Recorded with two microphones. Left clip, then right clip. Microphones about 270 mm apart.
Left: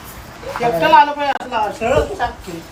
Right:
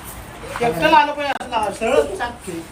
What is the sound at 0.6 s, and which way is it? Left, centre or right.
Speech, left.